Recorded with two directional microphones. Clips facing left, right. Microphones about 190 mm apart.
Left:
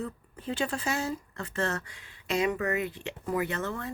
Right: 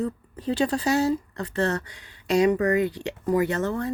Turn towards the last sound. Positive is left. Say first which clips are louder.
# right 7 dB
turn(degrees=-40)  # may be behind; listen again after turning